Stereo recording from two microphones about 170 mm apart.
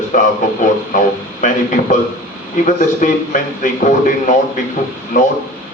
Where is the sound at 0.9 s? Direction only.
50° left (ahead or behind).